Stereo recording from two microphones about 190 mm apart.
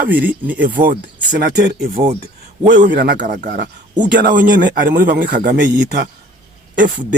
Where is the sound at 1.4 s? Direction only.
60° right (ahead or behind).